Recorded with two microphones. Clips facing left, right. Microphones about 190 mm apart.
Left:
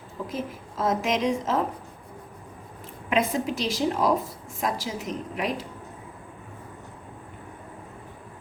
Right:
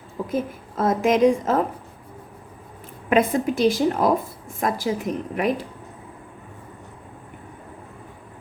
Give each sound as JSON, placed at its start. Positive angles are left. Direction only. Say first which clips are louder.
{"t": 0.3, "sound": "a woman's voice", "louder": "right 8 dB", "side_deg": -55}
{"t": 3.1, "sound": "a woman's voice", "louder": "right 5 dB", "side_deg": -55}